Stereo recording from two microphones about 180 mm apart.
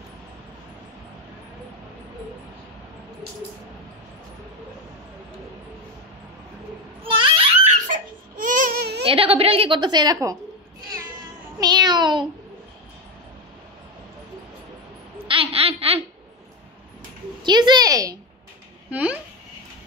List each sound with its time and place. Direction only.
7.0 s a sound: 30° right (ahead or behind)
7.8 s baby cry: 45° right (ahead or behind)
9.0 s a woman's voice: 30° right (ahead or behind)
11.6 s meow: 25° right (ahead or behind)
15.2 s a sound: 30° right (ahead or behind)
17.4 s a woman's voice: 25° right (ahead or behind)
18.9 s a child's voice: 5° right (ahead or behind)